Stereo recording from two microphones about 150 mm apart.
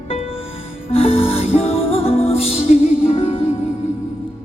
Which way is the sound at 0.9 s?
40° left (ahead or behind).